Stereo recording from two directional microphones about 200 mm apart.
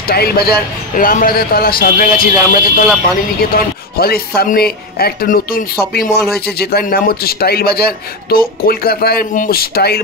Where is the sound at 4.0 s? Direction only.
50° left (ahead or behind).